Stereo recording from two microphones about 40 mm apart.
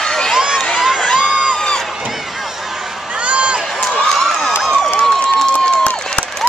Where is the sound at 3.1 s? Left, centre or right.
Right.